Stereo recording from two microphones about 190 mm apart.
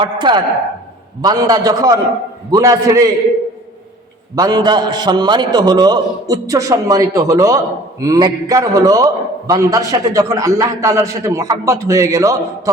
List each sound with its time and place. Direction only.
0.0 s a man's voice: 25° right (ahead or behind)
4.4 s a man's voice: 20° right (ahead or behind)